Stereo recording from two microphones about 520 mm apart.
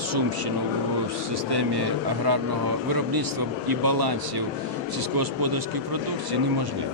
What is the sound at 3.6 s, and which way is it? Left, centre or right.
Speech, right.